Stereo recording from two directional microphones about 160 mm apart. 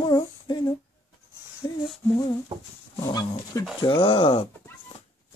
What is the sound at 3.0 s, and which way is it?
Speech, 25° left (ahead or behind).